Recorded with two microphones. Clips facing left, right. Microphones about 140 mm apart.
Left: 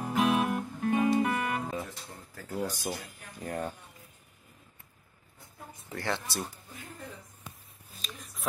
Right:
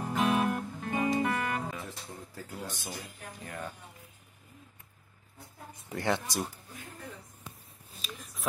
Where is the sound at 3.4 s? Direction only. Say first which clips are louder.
Left 7 dB; 40° left (ahead or behind).